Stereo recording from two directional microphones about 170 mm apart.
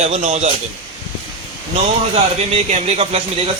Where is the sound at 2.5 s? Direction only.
40° right (ahead or behind).